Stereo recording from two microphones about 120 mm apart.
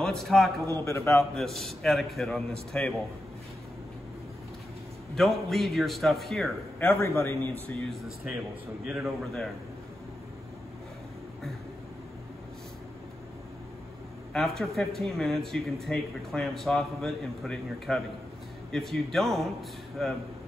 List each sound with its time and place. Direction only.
0.0 s a man's voice: centre (ahead or behind)
0.7 s a man's voice: 20° left (ahead or behind)
1.3 s speech: 5° left (ahead or behind)
5.1 s speech: centre (ahead or behind)
7.0 s a man's voice: 20° left (ahead or behind)
8.8 s a man's voice: 10° right (ahead or behind)
14.3 s speech: 5° left (ahead or behind)